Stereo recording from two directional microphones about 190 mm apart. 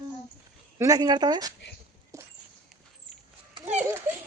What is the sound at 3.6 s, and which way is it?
Children playing, 10° right (ahead or behind).